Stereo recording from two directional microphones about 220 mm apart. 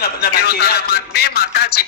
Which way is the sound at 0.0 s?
45° left (ahead or behind).